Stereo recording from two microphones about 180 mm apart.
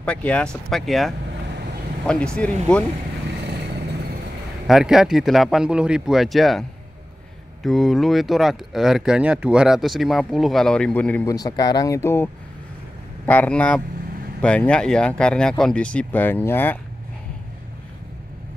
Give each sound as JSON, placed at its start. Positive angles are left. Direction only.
{"t": 0.0, "sound": "speech", "side_deg": 5}
{"t": 4.6, "sound": "speech", "side_deg": -5}
{"t": 7.6, "sound": "speech", "side_deg": 0}
{"t": 11.2, "sound": "speech", "side_deg": 20}